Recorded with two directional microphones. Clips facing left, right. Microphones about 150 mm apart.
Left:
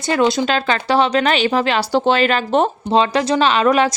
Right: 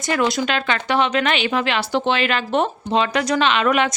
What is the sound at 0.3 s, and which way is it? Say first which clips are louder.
Speech: left 4 dB; 35° left (ahead or behind).